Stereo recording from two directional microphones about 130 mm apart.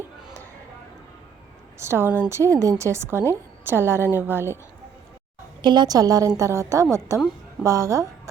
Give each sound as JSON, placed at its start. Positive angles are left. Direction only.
{"t": 1.8, "sound": "a woman's voice", "side_deg": -20}
{"t": 5.6, "sound": "a woman's voice", "side_deg": -35}